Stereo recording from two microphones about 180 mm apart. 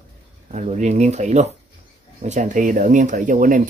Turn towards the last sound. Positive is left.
turn(degrees=-45)  # may be behind; listen again after turning